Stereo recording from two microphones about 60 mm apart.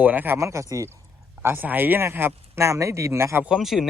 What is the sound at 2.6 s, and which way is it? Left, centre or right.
Speech, right.